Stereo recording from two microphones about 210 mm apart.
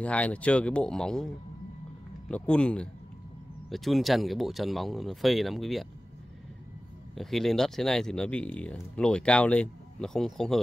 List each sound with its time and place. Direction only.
0.0 s speech: 5° left (ahead or behind)
7.2 s speech: centre (ahead or behind)